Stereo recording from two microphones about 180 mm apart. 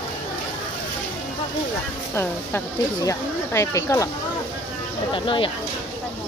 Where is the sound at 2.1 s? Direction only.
10° left (ahead or behind).